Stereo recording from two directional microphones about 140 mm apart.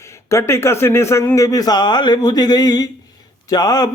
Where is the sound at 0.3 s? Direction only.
20° left (ahead or behind).